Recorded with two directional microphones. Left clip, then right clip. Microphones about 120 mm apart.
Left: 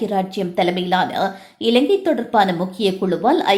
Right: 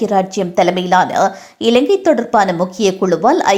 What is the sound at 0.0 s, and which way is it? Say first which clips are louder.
A woman's voice: right 6 dB; 35° right (ahead or behind).